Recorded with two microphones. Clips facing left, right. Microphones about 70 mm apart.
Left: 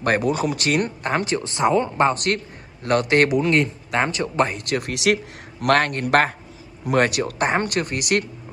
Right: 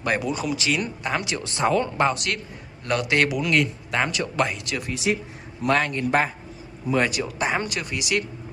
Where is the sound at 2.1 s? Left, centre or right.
Left.